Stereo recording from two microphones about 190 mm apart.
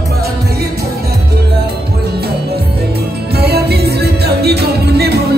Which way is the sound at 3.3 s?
55° right (ahead or behind).